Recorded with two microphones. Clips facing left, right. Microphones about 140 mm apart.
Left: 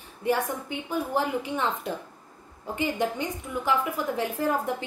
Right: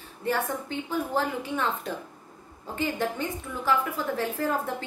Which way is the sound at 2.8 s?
15° left (ahead or behind).